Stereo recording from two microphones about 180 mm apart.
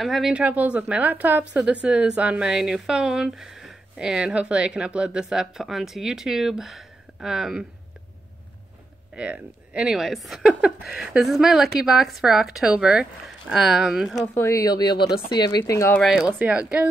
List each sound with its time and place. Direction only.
0.0 s a woman's voice: centre (ahead or behind)
9.1 s a woman's voice: 5° right (ahead or behind)
14.2 s speech: 15° left (ahead or behind)
16.0 s speech: 5° right (ahead or behind)